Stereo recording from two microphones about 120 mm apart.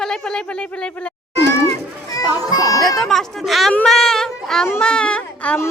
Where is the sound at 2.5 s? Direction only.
30° left (ahead or behind).